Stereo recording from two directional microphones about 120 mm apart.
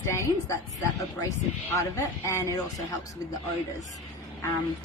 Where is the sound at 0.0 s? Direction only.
25° left (ahead or behind).